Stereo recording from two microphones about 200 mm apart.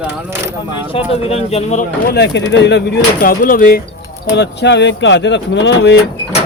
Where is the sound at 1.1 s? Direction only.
30° left (ahead or behind).